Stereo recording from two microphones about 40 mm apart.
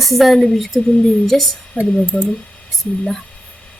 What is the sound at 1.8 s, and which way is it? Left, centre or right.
Speech, left.